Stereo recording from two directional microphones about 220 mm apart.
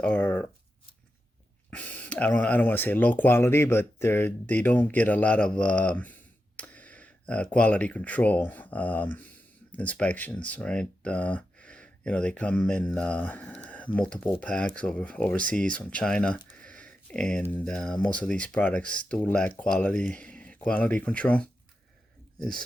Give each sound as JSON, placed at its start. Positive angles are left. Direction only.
{"t": 0.0, "sound": "shuffling cards", "side_deg": 5}
{"t": 1.7, "sound": "speech", "side_deg": 5}
{"t": 6.6, "sound": "a sound", "side_deg": 5}
{"t": 7.5, "sound": "speech", "side_deg": 5}